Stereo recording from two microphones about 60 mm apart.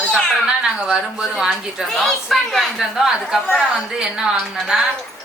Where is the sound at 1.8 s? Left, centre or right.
Centre.